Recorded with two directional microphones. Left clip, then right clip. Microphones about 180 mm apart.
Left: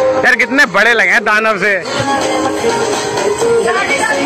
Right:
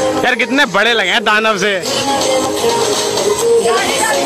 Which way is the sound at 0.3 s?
15° right (ahead or behind).